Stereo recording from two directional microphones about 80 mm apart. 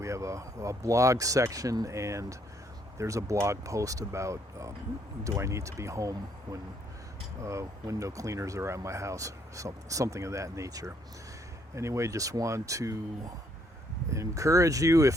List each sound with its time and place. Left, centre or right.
0.0 s speech: right